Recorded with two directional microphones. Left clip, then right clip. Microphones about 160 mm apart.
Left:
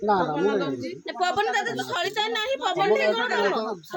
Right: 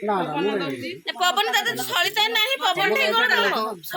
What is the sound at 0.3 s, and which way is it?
Speech, 35° left (ahead or behind).